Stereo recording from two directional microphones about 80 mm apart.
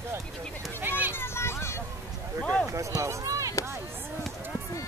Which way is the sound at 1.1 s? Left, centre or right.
Left.